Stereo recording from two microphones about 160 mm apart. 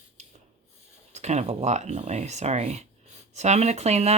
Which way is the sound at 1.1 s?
45° right (ahead or behind).